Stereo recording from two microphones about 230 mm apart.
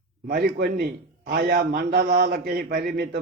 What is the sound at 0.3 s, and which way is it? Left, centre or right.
A man's voice, right.